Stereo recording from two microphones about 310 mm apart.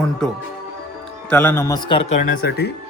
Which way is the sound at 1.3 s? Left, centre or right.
Centre.